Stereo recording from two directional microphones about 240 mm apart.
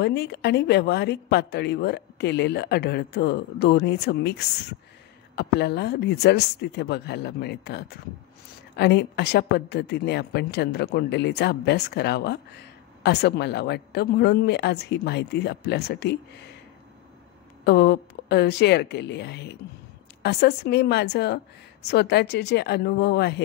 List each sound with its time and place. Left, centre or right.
0.0 s a woman's voice: left
17.6 s a woman's voice: left